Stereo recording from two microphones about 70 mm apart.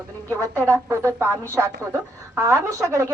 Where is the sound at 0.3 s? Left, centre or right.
Right.